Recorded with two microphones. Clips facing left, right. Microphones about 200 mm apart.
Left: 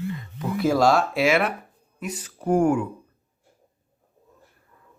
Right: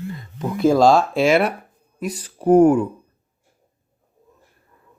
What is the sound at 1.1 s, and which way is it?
Speech, 30° right (ahead or behind).